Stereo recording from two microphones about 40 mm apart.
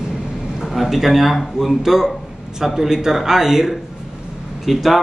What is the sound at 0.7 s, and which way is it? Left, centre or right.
Speech, centre.